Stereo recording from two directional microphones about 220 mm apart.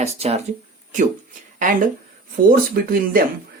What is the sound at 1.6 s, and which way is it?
Speech, 35° right (ahead or behind).